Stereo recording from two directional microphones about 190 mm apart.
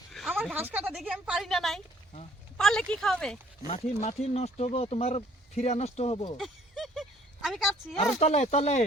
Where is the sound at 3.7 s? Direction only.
35° left (ahead or behind).